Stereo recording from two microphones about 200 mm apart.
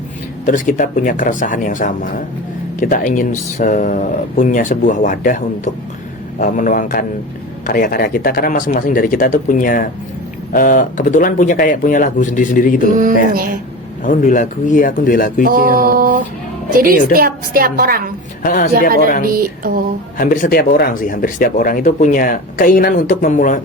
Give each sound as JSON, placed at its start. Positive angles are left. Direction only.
{"t": 0.4, "sound": "speech", "side_deg": 40}
{"t": 13.3, "sound": "a woman's voice", "side_deg": -45}
{"t": 14.0, "sound": "speech", "side_deg": 40}
{"t": 15.4, "sound": "a woman's voice", "side_deg": -45}
{"t": 18.4, "sound": "speech", "side_deg": 45}
{"t": 19.2, "sound": "a woman's voice", "side_deg": -45}
{"t": 20.1, "sound": "speech", "side_deg": 45}